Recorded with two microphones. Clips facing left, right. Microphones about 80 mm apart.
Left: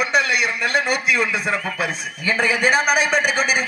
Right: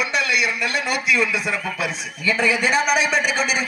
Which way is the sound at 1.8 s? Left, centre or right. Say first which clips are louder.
Left 1 dB; left.